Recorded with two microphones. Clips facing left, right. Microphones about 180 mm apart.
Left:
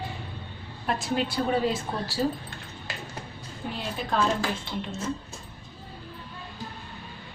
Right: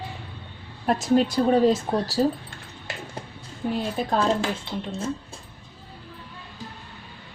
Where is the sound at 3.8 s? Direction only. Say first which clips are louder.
Right 2 dB; 50° right (ahead or behind).